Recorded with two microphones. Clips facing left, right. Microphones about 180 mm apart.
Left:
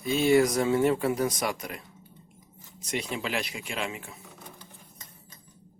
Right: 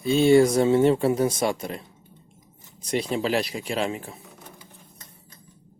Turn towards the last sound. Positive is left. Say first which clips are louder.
# right 7 dB
turn(degrees=-35)  # may be behind; listen again after turning